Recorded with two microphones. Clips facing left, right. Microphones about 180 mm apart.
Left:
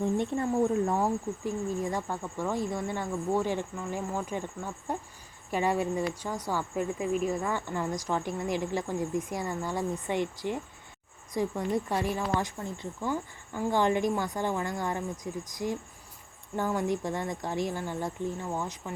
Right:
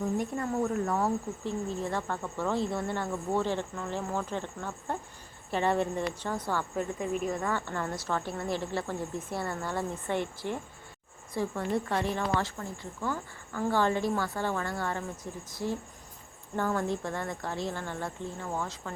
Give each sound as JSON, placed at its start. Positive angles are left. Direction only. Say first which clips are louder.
{"t": 0.0, "sound": "speech", "louder": "left 3 dB", "side_deg": 25}
{"t": 0.9, "sound": "speech", "louder": "left 1 dB", "side_deg": 10}